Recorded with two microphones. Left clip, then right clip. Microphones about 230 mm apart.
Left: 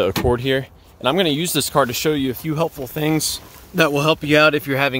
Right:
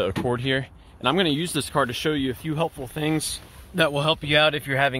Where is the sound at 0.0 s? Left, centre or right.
Left.